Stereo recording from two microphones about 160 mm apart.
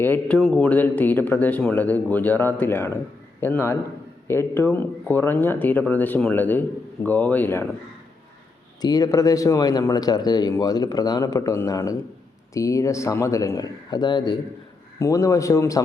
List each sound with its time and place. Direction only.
0.0 s speech: 10° left (ahead or behind)
8.8 s speech: 25° left (ahead or behind)